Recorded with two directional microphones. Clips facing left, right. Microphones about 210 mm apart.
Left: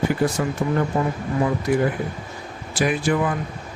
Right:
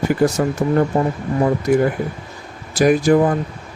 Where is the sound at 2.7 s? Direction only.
40° right (ahead or behind).